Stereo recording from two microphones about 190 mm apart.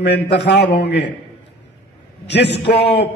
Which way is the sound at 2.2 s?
60° left (ahead or behind).